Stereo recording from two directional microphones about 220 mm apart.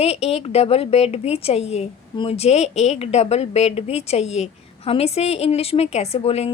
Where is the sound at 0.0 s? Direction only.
25° left (ahead or behind).